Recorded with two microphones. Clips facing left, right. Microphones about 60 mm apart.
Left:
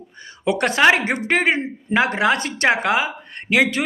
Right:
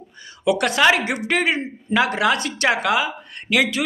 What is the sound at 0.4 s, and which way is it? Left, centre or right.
Speech, left.